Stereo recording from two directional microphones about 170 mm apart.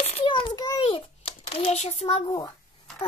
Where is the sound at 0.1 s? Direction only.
30° left (ahead or behind).